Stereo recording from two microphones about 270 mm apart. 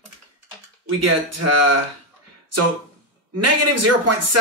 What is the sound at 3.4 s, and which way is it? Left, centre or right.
Speech, right.